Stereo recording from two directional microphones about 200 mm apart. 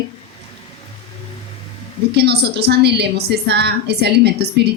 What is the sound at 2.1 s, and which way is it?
A woman's voice, 55° right (ahead or behind).